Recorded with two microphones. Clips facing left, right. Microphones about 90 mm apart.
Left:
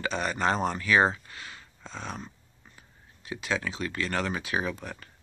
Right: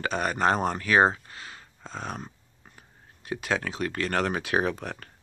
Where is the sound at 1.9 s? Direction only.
45° right (ahead or behind).